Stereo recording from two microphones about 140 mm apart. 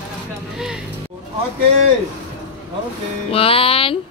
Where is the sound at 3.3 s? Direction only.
40° left (ahead or behind).